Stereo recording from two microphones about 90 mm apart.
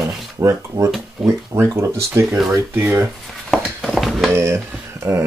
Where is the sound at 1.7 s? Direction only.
35° right (ahead or behind).